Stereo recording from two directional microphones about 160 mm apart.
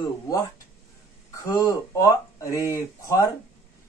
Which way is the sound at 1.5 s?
20° left (ahead or behind).